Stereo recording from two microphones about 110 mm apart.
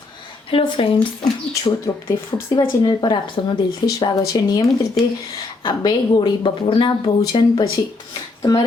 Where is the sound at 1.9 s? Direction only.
30° left (ahead or behind).